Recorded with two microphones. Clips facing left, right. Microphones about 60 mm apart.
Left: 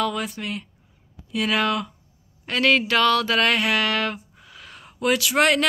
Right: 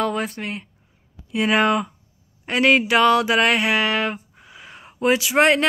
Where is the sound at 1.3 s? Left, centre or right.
Right.